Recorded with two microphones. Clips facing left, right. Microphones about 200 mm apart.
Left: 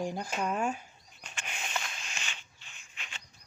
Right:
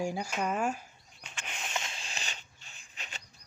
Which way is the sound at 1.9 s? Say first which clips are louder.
Right 1 dB; 30° right (ahead or behind).